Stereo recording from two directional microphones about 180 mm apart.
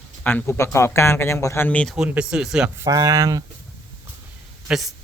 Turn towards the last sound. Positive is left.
turn(degrees=0)  # may be behind; listen again after turning